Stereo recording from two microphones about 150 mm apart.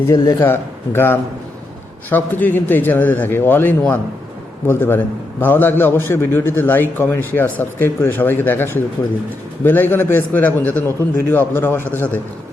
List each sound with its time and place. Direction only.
0.1 s a man's voice: 20° left (ahead or behind)